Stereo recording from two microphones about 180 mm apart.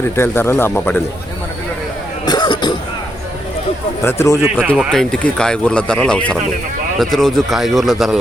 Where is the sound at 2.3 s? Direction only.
25° left (ahead or behind).